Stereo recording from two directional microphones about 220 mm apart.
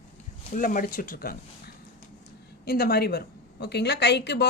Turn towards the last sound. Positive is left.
turn(degrees=50)  # may be behind; listen again after turning